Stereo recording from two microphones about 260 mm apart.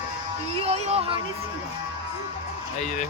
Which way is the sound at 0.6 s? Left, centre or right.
Right.